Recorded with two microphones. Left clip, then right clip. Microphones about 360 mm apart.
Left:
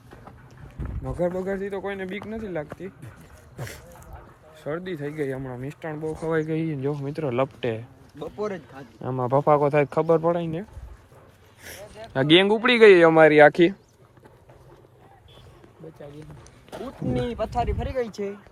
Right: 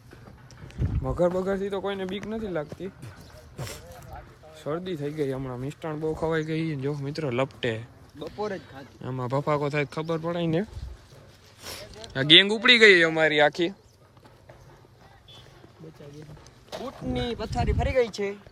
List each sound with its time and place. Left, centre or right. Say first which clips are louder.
1.0 s speech: right 2 dB; centre
4.6 s speech: even; centre
8.2 s speech: left 2 dB; centre
9.0 s speech: left 7 dB; centre
12.1 s speech: right 1 dB; centre
17.3 s speech: left 5 dB; centre
17.7 s speech: right 4 dB; centre